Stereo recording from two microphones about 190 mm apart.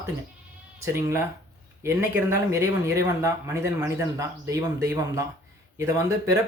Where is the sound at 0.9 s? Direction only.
15° right (ahead or behind).